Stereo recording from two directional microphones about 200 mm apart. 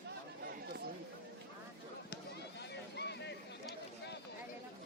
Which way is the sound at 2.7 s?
55° left (ahead or behind).